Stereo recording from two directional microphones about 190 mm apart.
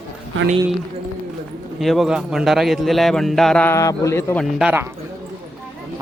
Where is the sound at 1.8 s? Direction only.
Centre (ahead or behind).